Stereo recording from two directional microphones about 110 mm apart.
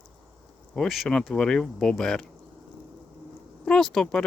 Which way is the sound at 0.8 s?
Centre (ahead or behind).